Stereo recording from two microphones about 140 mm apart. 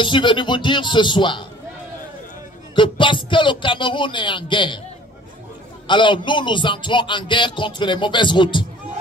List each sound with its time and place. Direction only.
0.0 s speech: 35° left (ahead or behind)
2.7 s speech: 35° left (ahead or behind)
5.9 s speech: 35° left (ahead or behind)